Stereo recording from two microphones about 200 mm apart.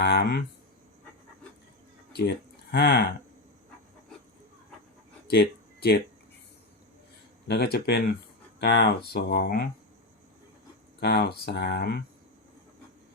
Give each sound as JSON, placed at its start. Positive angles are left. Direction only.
{"t": 0.0, "sound": "speech", "side_deg": 55}
{"t": 2.7, "sound": "speech", "side_deg": 55}
{"t": 5.3, "sound": "a sound", "side_deg": 55}
{"t": 7.4, "sound": "speech", "side_deg": 55}
{"t": 11.0, "sound": "speech", "side_deg": 55}